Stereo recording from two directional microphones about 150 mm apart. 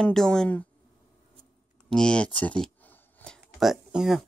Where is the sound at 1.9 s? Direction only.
5° left (ahead or behind).